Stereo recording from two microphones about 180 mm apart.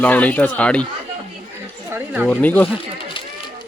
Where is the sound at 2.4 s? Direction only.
10° left (ahead or behind).